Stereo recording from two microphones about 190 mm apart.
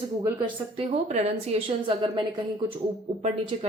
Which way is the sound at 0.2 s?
25° right (ahead or behind).